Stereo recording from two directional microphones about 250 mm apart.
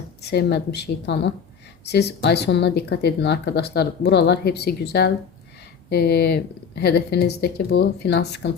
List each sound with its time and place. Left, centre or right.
0.2 s a woman's voice: left